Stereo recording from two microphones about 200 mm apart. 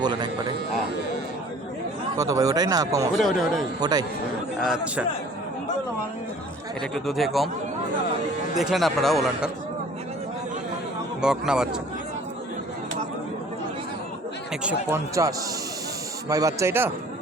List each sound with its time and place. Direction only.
0.0 s speech: 20° right (ahead or behind)
2.1 s speech: 15° right (ahead or behind)
3.2 s speech: centre (ahead or behind)
3.8 s speech: 20° right (ahead or behind)
4.6 s speech: centre (ahead or behind)
6.9 s speech: centre (ahead or behind)
8.5 s speech: centre (ahead or behind)
11.2 s speech: 5° right (ahead or behind)
14.6 s speech: 10° right (ahead or behind)